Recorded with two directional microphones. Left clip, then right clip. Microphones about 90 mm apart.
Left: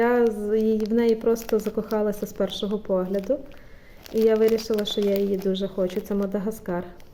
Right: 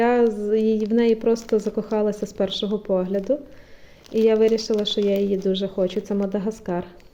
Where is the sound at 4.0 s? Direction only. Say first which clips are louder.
Right 2 dB; 40° left (ahead or behind).